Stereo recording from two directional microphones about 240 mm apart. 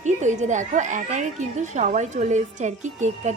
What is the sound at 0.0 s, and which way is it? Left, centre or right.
Speech, right.